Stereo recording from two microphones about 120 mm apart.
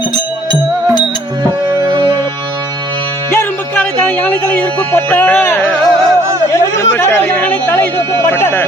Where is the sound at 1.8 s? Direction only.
45° right (ahead or behind).